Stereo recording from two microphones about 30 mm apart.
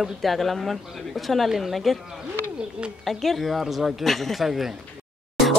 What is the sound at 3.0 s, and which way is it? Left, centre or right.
Speech, centre.